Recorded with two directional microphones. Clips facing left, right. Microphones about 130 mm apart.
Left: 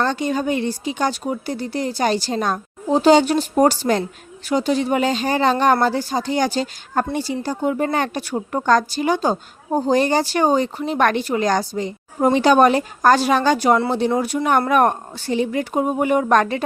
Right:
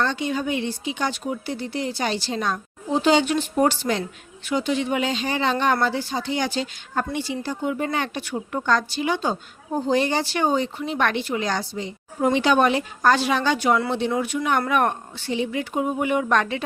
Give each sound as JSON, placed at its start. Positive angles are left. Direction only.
{"t": 0.0, "sound": "speech", "side_deg": 45}